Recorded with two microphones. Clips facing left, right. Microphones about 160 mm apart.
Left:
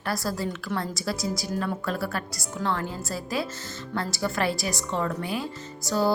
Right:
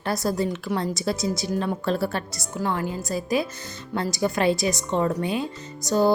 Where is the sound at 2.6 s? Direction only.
15° right (ahead or behind).